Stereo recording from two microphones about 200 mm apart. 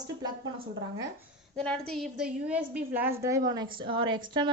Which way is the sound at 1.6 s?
5° left (ahead or behind).